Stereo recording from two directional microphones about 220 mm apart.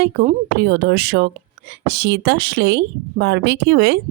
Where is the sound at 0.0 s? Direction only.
45° right (ahead or behind).